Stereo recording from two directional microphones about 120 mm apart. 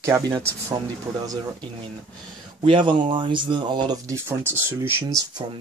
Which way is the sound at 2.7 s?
45° right (ahead or behind).